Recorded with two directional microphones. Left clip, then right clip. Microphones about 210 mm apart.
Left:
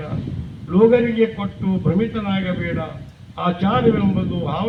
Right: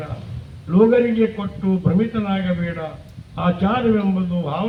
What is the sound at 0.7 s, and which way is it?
A man's voice, 55° right (ahead or behind).